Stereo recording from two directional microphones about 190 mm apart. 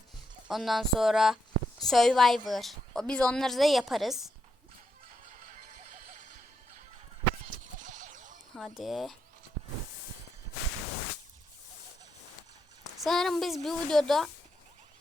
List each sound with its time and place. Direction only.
0.4 s a woman's voice: centre (ahead or behind)
6.1 s music: 40° right (ahead or behind)
7.8 s a sound: 40° right (ahead or behind)
8.5 s a woman's voice: centre (ahead or behind)
12.8 s a woman's voice: centre (ahead or behind)